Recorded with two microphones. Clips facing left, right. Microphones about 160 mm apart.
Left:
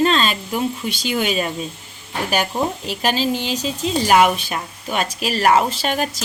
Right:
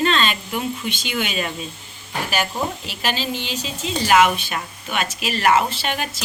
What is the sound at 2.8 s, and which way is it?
A woman's voice, 45° left (ahead or behind).